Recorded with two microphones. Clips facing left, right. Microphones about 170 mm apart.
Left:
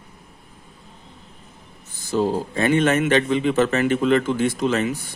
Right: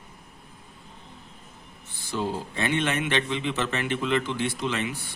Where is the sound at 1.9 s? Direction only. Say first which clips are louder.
Left 8 dB; 45° left (ahead or behind).